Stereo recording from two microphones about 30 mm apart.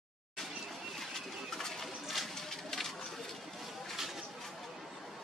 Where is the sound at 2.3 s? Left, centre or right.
Centre.